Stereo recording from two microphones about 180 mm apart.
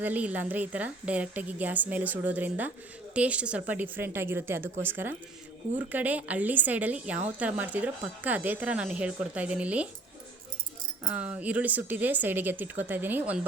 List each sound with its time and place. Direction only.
0.0 s a woman's voice: 10° right (ahead or behind)
11.1 s a woman's voice: 5° right (ahead or behind)